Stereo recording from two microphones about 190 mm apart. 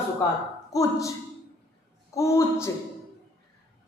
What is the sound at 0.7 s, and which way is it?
Speech, 20° left (ahead or behind).